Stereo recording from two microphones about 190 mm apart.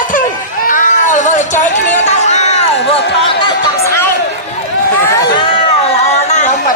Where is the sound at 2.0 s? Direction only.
35° left (ahead or behind).